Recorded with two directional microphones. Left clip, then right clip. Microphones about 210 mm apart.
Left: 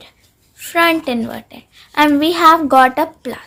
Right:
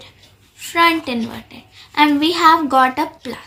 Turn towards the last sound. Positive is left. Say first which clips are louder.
# left 3 dB
turn(degrees=50)  # may be behind; listen again after turning